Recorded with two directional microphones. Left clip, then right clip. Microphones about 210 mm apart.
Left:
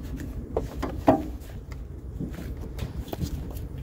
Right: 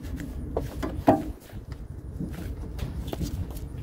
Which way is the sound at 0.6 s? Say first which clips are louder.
Left 1 dB; 20° left (ahead or behind).